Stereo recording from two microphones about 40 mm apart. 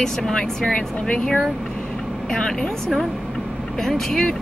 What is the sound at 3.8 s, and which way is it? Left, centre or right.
Speech, centre.